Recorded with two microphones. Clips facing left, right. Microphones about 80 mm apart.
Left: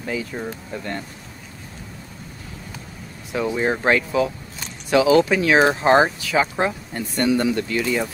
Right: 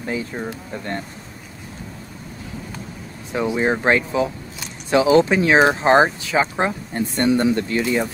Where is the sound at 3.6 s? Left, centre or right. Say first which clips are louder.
Right 1 dB; right.